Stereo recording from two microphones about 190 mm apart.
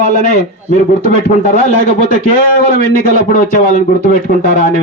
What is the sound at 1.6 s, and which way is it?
Speech, 45° left (ahead or behind).